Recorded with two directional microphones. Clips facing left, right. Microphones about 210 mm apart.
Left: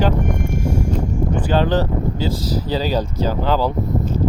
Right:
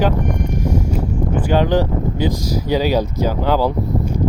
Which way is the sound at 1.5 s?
10° right (ahead or behind).